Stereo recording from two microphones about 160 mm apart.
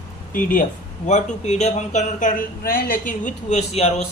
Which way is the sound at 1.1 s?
45° left (ahead or behind).